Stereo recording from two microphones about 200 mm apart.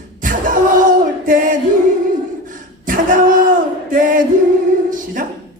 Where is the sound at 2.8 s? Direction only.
40° right (ahead or behind).